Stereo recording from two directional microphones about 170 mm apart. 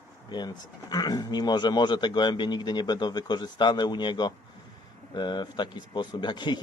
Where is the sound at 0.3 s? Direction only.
25° left (ahead or behind).